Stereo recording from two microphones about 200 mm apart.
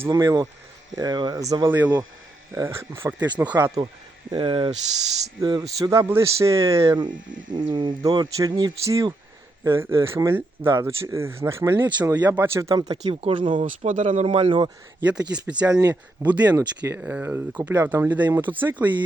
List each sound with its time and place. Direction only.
0.0 s speech: 20° right (ahead or behind)
4.3 s speech: 25° right (ahead or behind)
11.9 s speech: 10° right (ahead or behind)
13.8 s speech: 40° right (ahead or behind)
14.3 s speech: 25° right (ahead or behind)
15.3 s speech: 5° right (ahead or behind)